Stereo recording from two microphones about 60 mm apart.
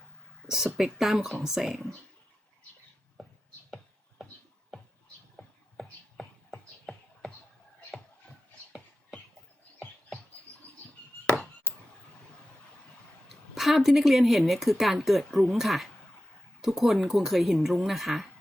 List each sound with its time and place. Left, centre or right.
0.4 s speech: centre
5.4 s music: centre
11.7 s a sound: left
13.2 s speech: centre